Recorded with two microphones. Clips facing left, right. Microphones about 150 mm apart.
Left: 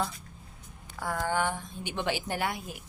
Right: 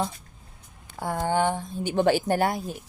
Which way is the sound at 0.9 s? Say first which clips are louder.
Right 5 dB; 25° right (ahead or behind).